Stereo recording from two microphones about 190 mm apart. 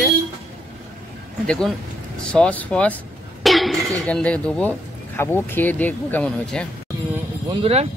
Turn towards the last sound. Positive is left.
turn(degrees=-30)  # may be behind; listen again after turning